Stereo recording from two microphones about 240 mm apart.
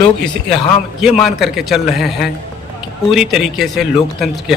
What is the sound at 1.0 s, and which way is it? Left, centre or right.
Speech, centre.